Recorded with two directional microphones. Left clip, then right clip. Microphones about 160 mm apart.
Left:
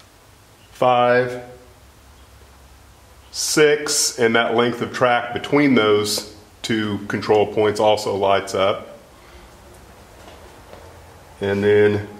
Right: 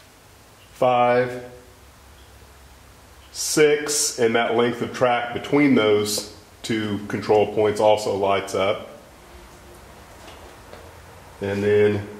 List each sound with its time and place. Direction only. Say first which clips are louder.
0.7 s speech: left 2 dB; 25° left (ahead or behind)
3.5 s speech: left 2 dB; 20° left (ahead or behind)
11.4 s speech: left 3 dB; 30° left (ahead or behind)